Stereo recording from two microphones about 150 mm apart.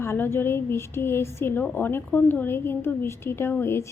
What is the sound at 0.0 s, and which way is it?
A woman's voice, 15° left (ahead or behind).